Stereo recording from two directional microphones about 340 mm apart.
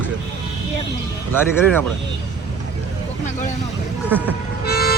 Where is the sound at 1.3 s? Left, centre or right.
Centre.